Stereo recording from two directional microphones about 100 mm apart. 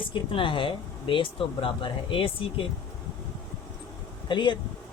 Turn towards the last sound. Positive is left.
turn(degrees=50)  # may be behind; listen again after turning